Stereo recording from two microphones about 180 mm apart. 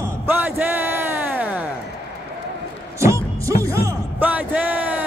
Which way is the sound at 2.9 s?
15° right (ahead or behind).